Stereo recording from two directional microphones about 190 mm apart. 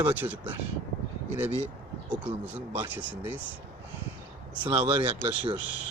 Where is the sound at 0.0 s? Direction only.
10° right (ahead or behind).